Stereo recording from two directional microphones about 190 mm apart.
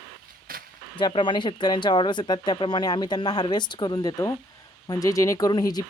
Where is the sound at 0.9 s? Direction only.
25° left (ahead or behind).